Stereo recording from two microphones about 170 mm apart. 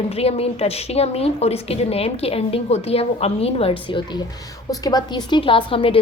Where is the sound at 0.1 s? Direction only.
35° left (ahead or behind).